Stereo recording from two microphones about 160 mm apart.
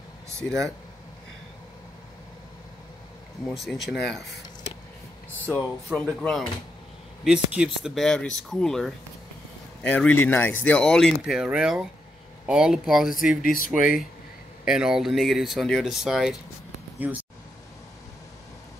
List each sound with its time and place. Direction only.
0.4 s speech: 5° left (ahead or behind)
3.4 s speech: centre (ahead or behind)
5.4 s speech: 10° left (ahead or behind)
7.2 s speech: 5° right (ahead or behind)
13.4 s speech: 60° left (ahead or behind)
14.6 s speech: 5° right (ahead or behind)